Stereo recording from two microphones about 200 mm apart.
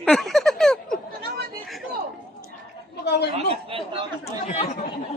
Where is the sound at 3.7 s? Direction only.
25° right (ahead or behind).